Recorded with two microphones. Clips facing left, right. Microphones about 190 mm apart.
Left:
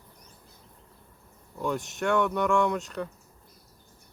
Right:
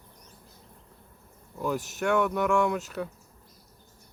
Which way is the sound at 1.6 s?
5° right (ahead or behind).